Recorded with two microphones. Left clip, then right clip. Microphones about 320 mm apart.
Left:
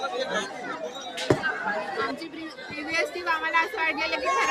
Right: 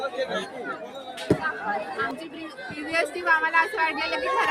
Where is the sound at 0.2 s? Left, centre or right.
Centre.